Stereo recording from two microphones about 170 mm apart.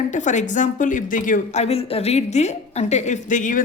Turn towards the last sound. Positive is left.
turn(degrees=50)  # may be behind; listen again after turning